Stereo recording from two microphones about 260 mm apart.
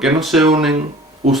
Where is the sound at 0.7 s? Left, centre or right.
Right.